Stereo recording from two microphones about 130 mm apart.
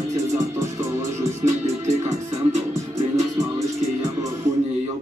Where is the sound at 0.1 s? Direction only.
25° right (ahead or behind).